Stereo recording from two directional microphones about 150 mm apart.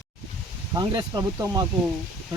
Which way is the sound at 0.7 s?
30° right (ahead or behind).